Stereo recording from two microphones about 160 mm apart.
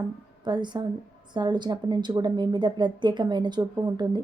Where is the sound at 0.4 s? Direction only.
25° right (ahead or behind).